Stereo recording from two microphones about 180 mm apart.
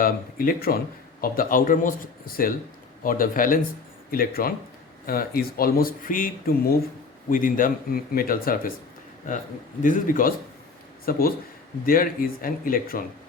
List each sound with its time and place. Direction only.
0.0 s speech: 55° left (ahead or behind)
9.8 s speech: 50° left (ahead or behind)